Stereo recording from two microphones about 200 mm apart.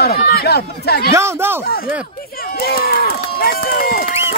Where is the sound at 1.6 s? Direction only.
50° left (ahead or behind).